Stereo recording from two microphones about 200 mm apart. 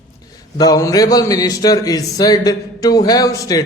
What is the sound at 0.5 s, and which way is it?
A man's voice, 20° left (ahead or behind).